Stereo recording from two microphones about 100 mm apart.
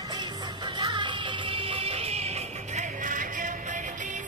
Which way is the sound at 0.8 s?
50° right (ahead or behind).